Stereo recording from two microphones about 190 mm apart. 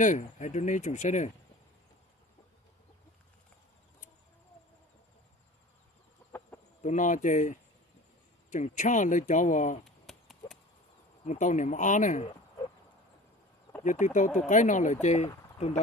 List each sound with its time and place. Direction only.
0.0 s speech: 40° left (ahead or behind)
6.8 s speech: 40° left (ahead or behind)
9.8 s chop: centre (ahead or behind)
11.2 s speech: 40° left (ahead or behind)
13.8 s speech: 40° left (ahead or behind)